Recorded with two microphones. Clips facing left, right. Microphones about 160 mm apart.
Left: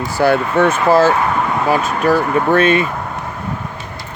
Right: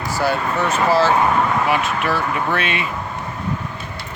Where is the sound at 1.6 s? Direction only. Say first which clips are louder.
Left 5 dB; 40° left (ahead or behind).